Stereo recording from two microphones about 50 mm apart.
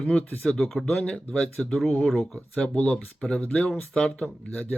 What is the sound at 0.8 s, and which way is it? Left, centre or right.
Speech, centre.